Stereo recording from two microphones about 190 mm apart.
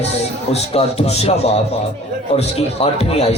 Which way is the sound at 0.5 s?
30° left (ahead or behind).